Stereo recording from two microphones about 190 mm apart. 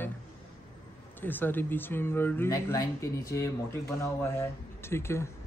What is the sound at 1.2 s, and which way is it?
Speech, 10° left (ahead or behind).